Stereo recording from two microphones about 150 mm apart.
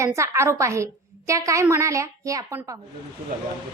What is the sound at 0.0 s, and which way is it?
A woman's voice, 20° right (ahead or behind).